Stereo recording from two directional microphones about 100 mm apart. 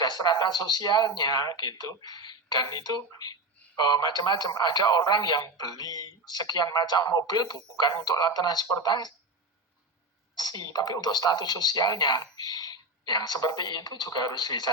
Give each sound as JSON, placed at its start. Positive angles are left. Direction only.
{"t": 0.0, "sound": "speech", "side_deg": 40}
{"t": 10.3, "sound": "speech", "side_deg": 40}